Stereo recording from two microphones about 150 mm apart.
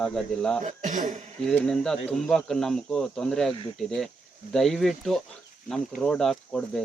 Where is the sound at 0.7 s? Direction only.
55° right (ahead or behind).